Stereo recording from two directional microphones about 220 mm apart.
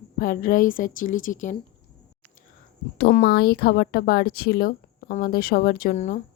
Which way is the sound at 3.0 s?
45° left (ahead or behind).